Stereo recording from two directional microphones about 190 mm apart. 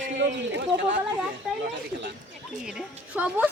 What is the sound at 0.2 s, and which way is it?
Speech, 70° right (ahead or behind).